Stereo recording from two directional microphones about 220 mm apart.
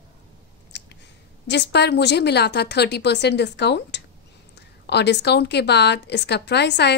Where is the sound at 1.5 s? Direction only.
50° left (ahead or behind).